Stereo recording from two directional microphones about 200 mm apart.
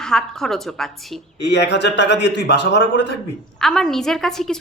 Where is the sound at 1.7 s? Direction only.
60° left (ahead or behind).